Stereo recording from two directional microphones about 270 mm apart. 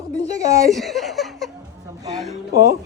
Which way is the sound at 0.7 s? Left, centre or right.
Centre.